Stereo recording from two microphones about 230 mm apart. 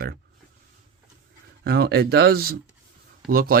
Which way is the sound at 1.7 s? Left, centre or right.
Right.